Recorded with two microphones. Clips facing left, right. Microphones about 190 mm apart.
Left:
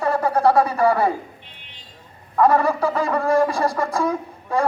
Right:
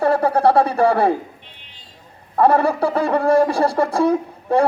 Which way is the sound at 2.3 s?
30° right (ahead or behind).